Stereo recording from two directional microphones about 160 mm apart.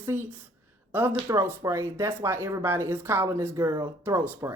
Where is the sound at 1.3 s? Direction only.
15° right (ahead or behind).